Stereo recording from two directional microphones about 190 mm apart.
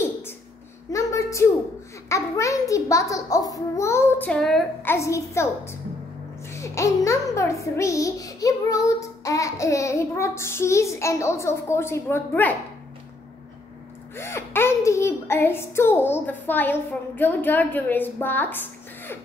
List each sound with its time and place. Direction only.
0.9 s a sound: 15° left (ahead or behind)
2.0 s a child's voice: 15° left (ahead or behind)
4.9 s a child's voice: 15° left (ahead or behind)
14.1 s a child's voice: 10° left (ahead or behind)